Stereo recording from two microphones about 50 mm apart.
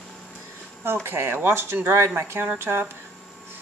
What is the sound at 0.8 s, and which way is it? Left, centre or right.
Speech, right.